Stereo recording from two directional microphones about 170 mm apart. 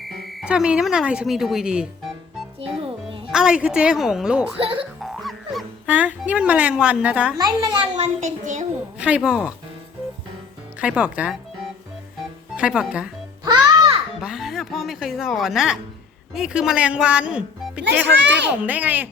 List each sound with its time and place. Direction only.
0.3 s speech: centre (ahead or behind)
2.6 s music: 35° right (ahead or behind)
3.3 s speech: 5° right (ahead or behind)
4.5 s speech: 30° right (ahead or behind)
5.0 s speech: centre (ahead or behind)
7.3 s a child's voice: 25° right (ahead or behind)
7.9 s child singing: 40° right (ahead or behind)
9.0 s speech: 5° right (ahead or behind)
10.8 s speech: 5° right (ahead or behind)
12.5 s speech: 5° right (ahead or behind)
13.4 s music: 25° right (ahead or behind)
14.2 s speech: 5° right (ahead or behind)
18.0 s a child's voice: 90° right
18.6 s speech: 10° right (ahead or behind)